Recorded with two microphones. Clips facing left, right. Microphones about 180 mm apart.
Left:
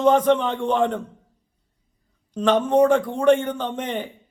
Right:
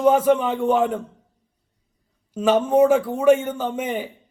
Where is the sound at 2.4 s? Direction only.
5° right (ahead or behind).